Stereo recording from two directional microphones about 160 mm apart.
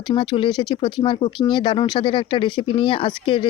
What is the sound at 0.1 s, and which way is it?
Speech, 30° left (ahead or behind).